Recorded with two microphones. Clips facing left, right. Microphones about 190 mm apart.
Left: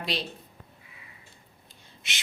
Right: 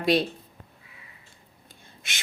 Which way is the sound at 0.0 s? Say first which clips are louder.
Right 10 dB; 50° right (ahead or behind).